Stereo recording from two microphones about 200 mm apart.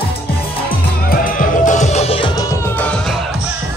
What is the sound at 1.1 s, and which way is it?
Music, 45° left (ahead or behind).